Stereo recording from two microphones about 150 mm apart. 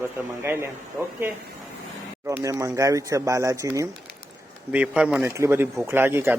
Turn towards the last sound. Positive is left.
turn(degrees=-15)  # may be behind; listen again after turning